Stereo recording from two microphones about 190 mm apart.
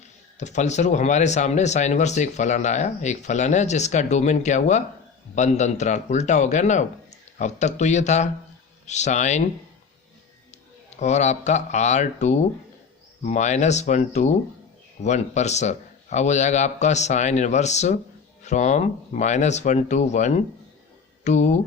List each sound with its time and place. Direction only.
0.3 s speech: 40° left (ahead or behind)
11.0 s speech: 35° left (ahead or behind)